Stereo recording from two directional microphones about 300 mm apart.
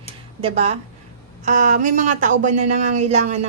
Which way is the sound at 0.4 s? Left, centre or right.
Right.